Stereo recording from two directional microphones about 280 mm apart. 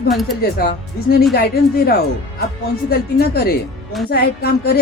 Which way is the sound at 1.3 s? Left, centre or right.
Left.